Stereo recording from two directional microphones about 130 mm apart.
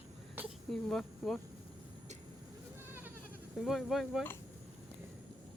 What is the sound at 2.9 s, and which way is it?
Goat, 15° right (ahead or behind).